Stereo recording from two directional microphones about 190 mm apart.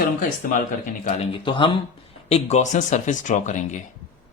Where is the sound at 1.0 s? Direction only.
30° left (ahead or behind).